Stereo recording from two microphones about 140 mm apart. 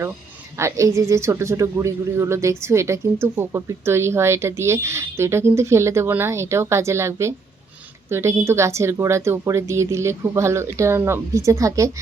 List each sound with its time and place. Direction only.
0.5 s a man's voice: 20° right (ahead or behind)